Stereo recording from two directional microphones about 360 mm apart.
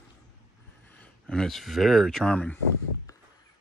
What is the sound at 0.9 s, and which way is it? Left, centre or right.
Speech, centre.